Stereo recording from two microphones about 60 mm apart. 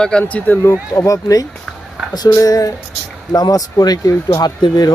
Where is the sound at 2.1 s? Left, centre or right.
Left.